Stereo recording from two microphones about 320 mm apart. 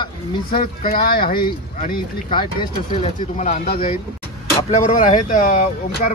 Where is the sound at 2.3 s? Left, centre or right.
Centre.